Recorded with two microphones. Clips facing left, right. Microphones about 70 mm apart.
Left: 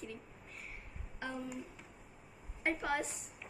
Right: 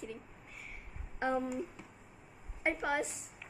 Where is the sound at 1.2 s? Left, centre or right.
Right.